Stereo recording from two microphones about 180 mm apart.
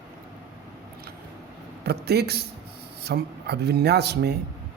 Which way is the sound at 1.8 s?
65° right (ahead or behind).